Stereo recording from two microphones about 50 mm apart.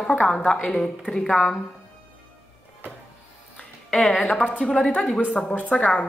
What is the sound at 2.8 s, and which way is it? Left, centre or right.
Music, right.